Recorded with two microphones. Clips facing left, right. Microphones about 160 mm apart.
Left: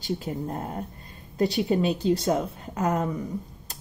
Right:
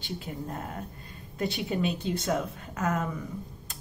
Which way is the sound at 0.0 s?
35° left (ahead or behind).